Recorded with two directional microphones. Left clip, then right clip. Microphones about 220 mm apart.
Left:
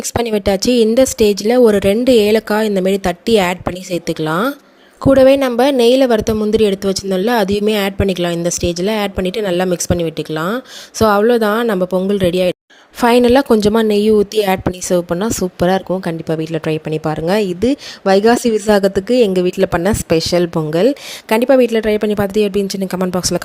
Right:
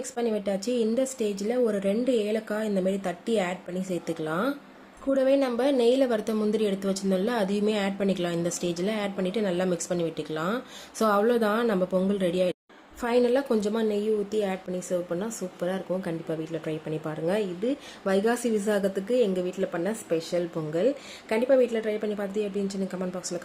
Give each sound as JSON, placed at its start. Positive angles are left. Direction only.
{"t": 0.1, "sound": "a woman's voice", "side_deg": 45}